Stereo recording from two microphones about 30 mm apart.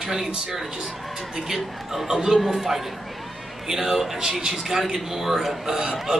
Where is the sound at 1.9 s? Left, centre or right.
Centre.